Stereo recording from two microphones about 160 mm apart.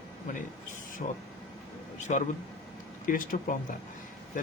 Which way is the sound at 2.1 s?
50° left (ahead or behind).